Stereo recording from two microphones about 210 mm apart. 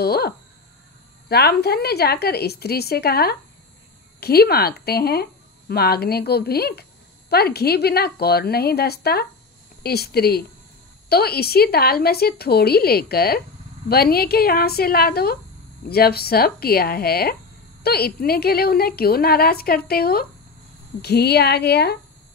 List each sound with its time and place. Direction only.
0.0 s speech: 50° left (ahead or behind)
1.3 s speech: 50° left (ahead or behind)